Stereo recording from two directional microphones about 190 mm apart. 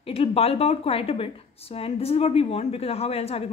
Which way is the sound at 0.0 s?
30° left (ahead or behind).